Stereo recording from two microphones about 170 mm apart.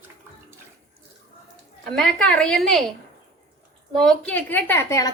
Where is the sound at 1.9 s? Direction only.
5° left (ahead or behind).